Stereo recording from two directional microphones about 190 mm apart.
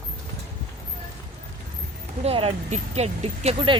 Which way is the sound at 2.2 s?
30° right (ahead or behind).